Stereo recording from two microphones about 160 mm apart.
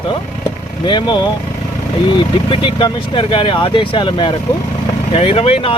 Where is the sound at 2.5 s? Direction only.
30° left (ahead or behind).